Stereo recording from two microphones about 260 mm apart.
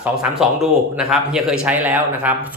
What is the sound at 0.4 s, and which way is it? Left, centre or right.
A man's voice, centre.